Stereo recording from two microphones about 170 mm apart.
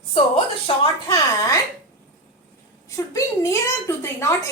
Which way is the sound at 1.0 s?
20° left (ahead or behind).